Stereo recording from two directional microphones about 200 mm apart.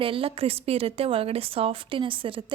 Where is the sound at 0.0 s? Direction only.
25° right (ahead or behind).